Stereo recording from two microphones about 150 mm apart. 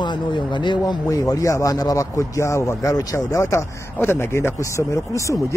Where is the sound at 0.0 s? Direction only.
30° left (ahead or behind).